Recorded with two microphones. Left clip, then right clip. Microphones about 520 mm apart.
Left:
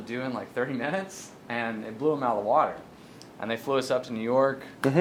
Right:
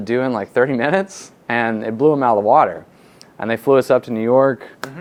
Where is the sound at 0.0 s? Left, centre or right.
Right.